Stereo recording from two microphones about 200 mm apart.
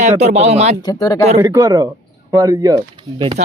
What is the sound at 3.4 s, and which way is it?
Speech, 35° right (ahead or behind).